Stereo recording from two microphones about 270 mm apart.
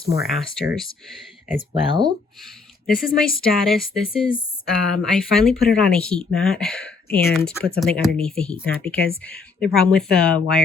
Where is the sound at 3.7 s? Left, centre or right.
Centre.